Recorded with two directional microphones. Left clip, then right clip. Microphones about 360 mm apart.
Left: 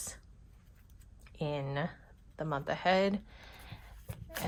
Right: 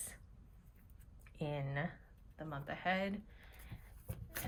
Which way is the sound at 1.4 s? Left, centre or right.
Centre.